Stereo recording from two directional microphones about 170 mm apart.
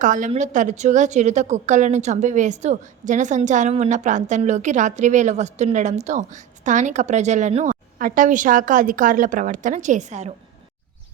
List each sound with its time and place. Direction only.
0.0 s a woman's voice: 50° right (ahead or behind)